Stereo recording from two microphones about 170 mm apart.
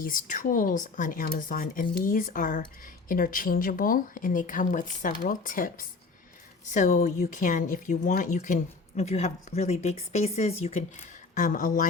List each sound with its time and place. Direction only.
0.0 s speech: 50° left (ahead or behind)